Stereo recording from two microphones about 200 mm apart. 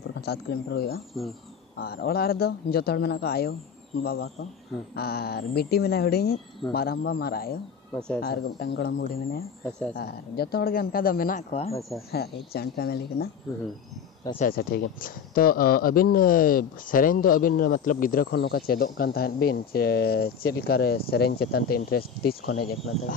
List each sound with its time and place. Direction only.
0.2 s speech: 50° left (ahead or behind)
9.7 s speech: 5° left (ahead or behind)
9.9 s speech: 50° left (ahead or behind)
14.4 s speech: 50° left (ahead or behind)